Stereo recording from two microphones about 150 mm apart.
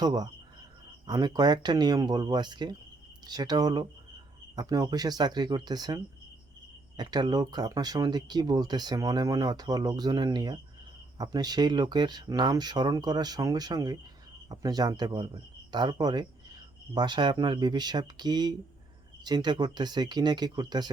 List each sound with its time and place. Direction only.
0.0 s speech: 25° right (ahead or behind)